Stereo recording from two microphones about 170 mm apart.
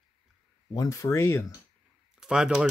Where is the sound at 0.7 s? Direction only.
20° left (ahead or behind).